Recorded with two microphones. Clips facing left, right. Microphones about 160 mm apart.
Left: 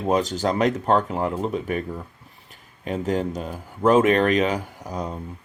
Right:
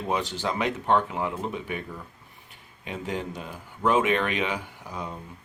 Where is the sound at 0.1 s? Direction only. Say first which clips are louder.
Left 7 dB; 40° left (ahead or behind).